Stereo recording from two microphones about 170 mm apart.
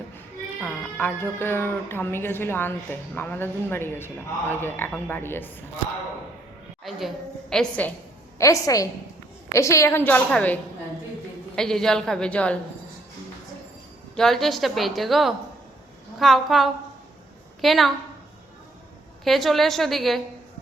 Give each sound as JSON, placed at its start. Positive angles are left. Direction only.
{"t": 0.6, "sound": "speech", "side_deg": 10}
{"t": 7.5, "sound": "speech", "side_deg": 5}
{"t": 8.4, "sound": "a woman's voice", "side_deg": 20}
{"t": 14.2, "sound": "a woman's voice", "side_deg": 0}
{"t": 19.2, "sound": "a woman's voice", "side_deg": 0}